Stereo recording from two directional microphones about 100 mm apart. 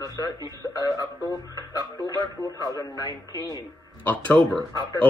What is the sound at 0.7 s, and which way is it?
Speech, 40° left (ahead or behind).